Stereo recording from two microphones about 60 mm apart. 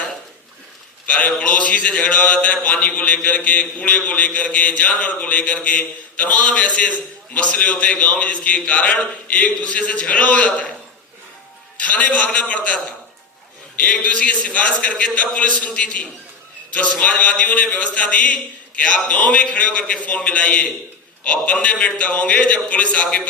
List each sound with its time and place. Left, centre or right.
1.0 s a man's voice: left
11.8 s a man's voice: left